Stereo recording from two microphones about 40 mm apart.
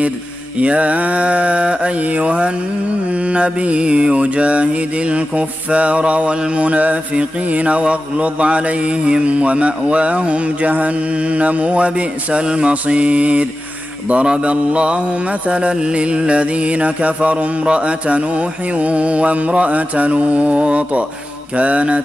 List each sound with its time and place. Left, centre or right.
0.6 s mantra: right